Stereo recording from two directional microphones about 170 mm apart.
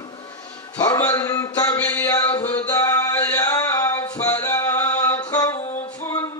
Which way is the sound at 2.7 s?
20° left (ahead or behind).